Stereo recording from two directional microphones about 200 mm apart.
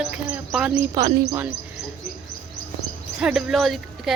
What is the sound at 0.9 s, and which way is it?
Speech, 20° right (ahead or behind).